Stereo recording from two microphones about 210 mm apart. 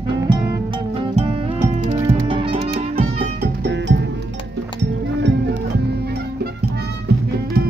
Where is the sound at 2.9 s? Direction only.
40° right (ahead or behind).